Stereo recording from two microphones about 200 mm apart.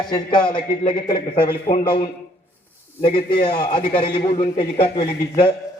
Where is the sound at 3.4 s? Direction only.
25° left (ahead or behind).